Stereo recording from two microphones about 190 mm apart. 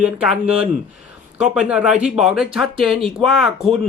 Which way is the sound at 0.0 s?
5° right (ahead or behind).